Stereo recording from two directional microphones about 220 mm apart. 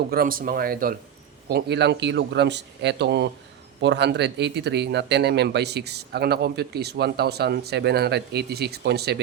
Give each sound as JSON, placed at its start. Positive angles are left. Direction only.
{"t": 0.1, "sound": "speech", "side_deg": -40}